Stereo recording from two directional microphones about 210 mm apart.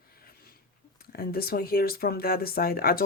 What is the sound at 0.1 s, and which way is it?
Speech, 45° left (ahead or behind).